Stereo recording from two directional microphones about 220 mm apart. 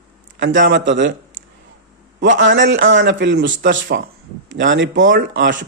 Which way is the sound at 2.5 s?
60° right (ahead or behind).